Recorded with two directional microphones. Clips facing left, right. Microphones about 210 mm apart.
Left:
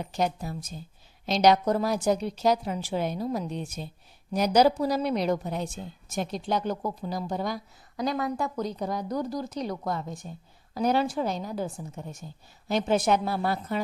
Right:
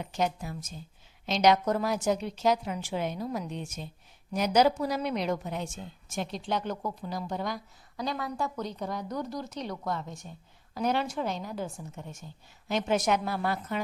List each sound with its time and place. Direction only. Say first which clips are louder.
0.0 s a woman's voice: left 2 dB; 35° left (ahead or behind)